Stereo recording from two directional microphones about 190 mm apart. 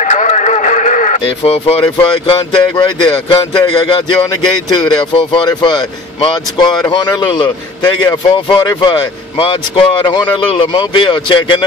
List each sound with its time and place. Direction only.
0.0 s radio: 40° left (ahead or behind)
1.2 s speech: 30° left (ahead or behind)